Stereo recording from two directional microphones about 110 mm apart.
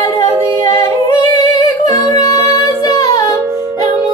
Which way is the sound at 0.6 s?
30° left (ahead or behind).